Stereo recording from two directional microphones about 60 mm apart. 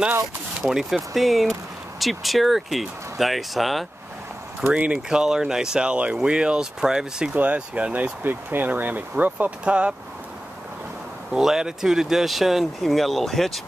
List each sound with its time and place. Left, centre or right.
0.6 s speech: centre
4.6 s speech: centre
11.3 s speech: centre